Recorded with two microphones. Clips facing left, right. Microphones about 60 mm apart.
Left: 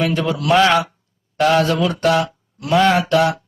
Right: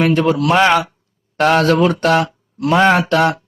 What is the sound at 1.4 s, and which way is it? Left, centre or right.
A man's voice, right.